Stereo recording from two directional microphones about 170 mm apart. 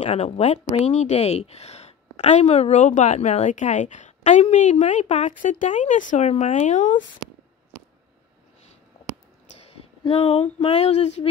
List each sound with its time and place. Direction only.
0.0 s a woman's voice: 40° left (ahead or behind)
9.7 s speech: 35° left (ahead or behind)